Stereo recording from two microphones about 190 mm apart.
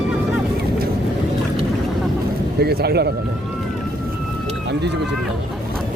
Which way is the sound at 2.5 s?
55° right (ahead or behind).